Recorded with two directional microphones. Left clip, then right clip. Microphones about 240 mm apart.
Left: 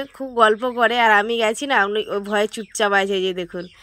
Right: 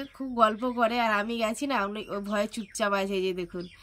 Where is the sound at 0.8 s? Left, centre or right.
Centre.